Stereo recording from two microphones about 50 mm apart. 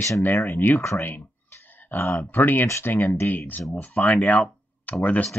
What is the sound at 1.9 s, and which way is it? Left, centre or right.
Speech, left.